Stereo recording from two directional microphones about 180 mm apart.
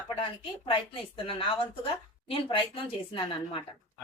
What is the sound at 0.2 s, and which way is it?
Speech, 30° left (ahead or behind).